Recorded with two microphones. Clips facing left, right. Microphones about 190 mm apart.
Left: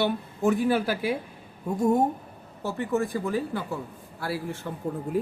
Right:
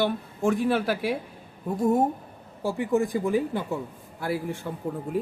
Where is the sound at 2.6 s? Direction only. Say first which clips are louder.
Right 3 dB; 15° right (ahead or behind).